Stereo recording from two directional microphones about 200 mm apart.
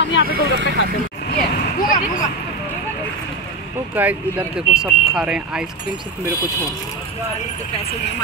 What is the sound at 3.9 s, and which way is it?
Speech, 10° right (ahead or behind).